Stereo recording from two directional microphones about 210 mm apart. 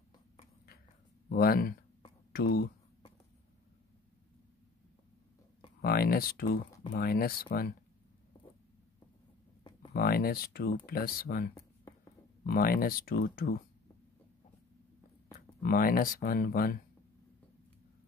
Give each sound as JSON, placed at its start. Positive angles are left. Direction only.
{"t": 1.3, "sound": "speech", "side_deg": 45}
{"t": 5.8, "sound": "speech", "side_deg": 45}
{"t": 9.6, "sound": "a sound", "side_deg": 20}
{"t": 9.9, "sound": "speech", "side_deg": 45}
{"t": 11.5, "sound": "a sound", "side_deg": 15}
{"t": 12.4, "sound": "speech", "side_deg": 45}
{"t": 15.6, "sound": "speech", "side_deg": 45}